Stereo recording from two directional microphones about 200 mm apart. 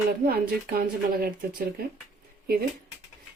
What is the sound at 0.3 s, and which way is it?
Speech, 50° right (ahead or behind).